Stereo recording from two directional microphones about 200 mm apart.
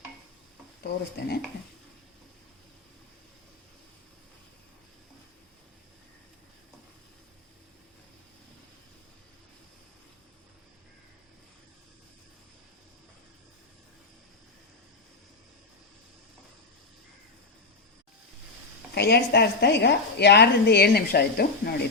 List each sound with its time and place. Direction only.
0.8 s a woman's voice: 55° left (ahead or behind)
18.9 s a woman's voice: 55° left (ahead or behind)